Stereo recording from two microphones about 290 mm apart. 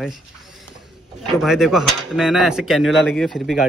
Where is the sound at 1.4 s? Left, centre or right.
Centre.